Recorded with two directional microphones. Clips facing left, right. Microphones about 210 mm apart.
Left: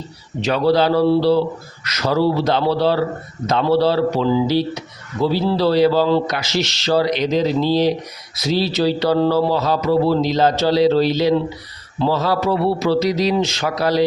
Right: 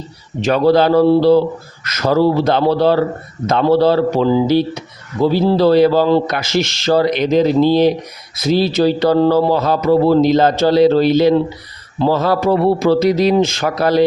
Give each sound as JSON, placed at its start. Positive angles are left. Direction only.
{"t": 0.4, "sound": "a man's voice", "side_deg": -50}